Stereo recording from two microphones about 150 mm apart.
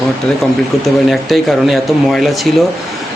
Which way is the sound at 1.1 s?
Centre (ahead or behind).